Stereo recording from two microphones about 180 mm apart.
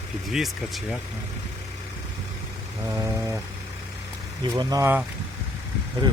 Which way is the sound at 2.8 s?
15° right (ahead or behind).